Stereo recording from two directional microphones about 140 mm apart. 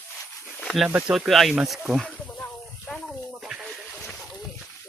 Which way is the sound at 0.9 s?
10° right (ahead or behind).